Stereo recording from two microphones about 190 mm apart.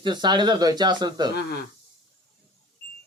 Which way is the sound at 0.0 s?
25° right (ahead or behind).